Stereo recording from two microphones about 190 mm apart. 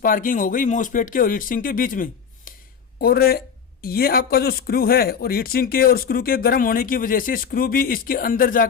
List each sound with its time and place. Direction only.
0.0 s speech: 45° left (ahead or behind)